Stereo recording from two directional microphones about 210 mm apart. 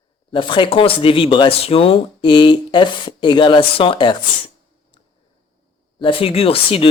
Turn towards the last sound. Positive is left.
turn(degrees=25)  # may be behind; listen again after turning